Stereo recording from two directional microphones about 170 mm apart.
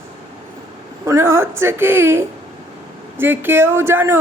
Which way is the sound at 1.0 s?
15° right (ahead or behind).